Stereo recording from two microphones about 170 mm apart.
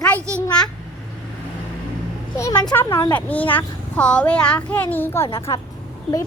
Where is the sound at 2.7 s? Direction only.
15° left (ahead or behind).